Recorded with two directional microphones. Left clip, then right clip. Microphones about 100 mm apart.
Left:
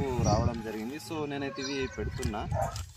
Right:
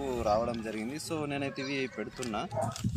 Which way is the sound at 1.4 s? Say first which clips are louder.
Even; 90° right.